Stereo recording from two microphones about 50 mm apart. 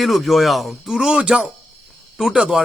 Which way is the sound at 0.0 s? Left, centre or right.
Centre.